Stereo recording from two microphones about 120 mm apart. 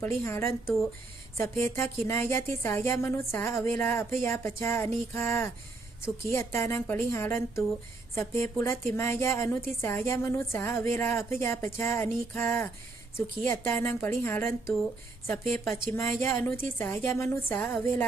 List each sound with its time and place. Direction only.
0.0 s a woman's voice: 20° left (ahead or behind)
16.0 s a woman's voice: 20° left (ahead or behind)